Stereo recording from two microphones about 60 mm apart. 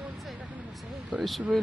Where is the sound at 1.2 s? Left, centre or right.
Centre.